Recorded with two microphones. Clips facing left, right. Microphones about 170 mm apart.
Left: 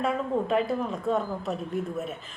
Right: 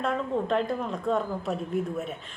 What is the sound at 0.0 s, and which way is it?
A woman's voice, 5° left (ahead or behind).